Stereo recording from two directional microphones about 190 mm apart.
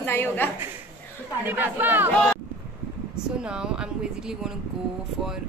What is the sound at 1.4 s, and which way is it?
Speech, 10° right (ahead or behind).